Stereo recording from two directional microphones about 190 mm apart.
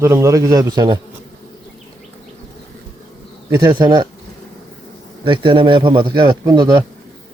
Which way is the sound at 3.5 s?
20° right (ahead or behind).